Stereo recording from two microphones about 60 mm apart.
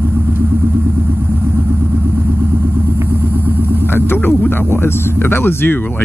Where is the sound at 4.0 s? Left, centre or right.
Left.